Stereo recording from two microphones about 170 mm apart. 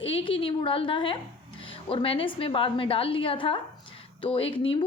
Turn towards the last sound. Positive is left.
turn(degrees=30)  # may be behind; listen again after turning